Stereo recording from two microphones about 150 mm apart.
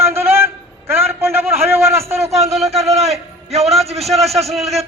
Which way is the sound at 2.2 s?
45° right (ahead or behind).